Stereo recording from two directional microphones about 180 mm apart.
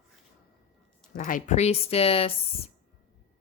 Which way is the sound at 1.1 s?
45° left (ahead or behind).